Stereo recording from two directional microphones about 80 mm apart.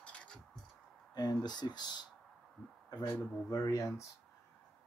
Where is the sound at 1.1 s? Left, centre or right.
Left.